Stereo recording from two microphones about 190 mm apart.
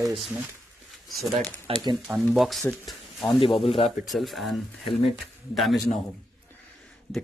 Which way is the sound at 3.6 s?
30° left (ahead or behind).